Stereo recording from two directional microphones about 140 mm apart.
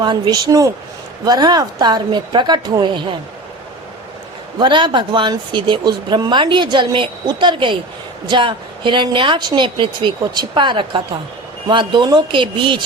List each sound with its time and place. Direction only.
0.0 s speech: 30° right (ahead or behind)
4.6 s speech: 35° right (ahead or behind)